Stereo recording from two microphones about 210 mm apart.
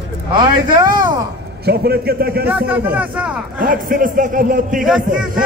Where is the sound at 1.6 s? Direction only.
50° right (ahead or behind).